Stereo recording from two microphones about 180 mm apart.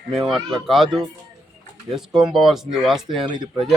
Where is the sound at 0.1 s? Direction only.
Centre (ahead or behind).